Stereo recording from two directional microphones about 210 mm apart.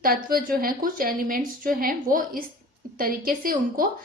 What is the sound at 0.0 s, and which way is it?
A woman's voice, 45° right (ahead or behind).